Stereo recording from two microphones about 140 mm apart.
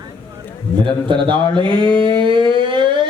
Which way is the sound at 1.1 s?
35° right (ahead or behind).